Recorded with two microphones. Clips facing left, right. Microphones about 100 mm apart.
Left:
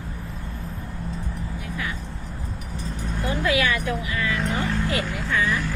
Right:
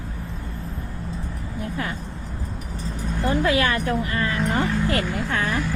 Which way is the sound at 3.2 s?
35° right (ahead or behind).